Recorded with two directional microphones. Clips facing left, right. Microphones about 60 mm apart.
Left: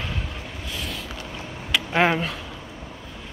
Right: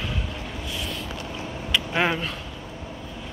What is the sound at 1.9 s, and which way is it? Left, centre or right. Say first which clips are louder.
Speech: left 5 dB; left.